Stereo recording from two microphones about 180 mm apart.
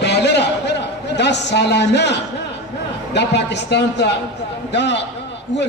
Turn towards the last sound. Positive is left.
turn(degrees=75)  # may be behind; listen again after turning